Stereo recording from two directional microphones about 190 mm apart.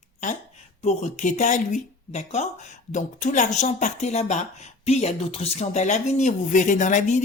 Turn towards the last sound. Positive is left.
turn(degrees=40)  # may be behind; listen again after turning